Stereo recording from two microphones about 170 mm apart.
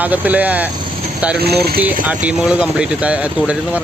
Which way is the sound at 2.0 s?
5° right (ahead or behind).